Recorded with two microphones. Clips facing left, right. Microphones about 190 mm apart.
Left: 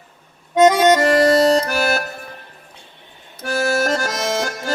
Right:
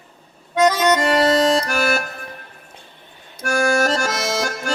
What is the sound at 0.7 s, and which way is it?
Accordion, 35° left (ahead or behind).